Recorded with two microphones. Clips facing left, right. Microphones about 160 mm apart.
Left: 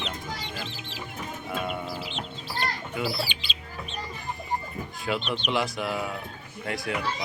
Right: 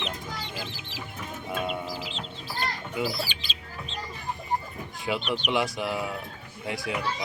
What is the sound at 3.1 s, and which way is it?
Speech, 45° right (ahead or behind).